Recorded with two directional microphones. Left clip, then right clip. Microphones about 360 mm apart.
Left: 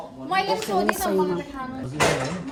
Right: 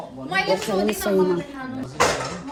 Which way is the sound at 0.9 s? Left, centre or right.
Centre.